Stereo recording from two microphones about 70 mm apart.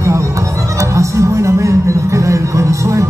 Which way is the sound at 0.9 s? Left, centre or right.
Right.